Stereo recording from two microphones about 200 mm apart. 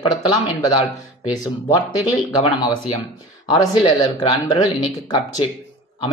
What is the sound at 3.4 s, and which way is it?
Speech, 20° left (ahead or behind).